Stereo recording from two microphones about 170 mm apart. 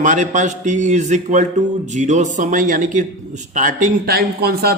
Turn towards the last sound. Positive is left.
turn(degrees=-65)  # may be behind; listen again after turning